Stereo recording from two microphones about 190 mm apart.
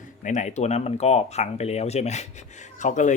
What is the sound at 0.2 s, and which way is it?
Speech, 40° left (ahead or behind).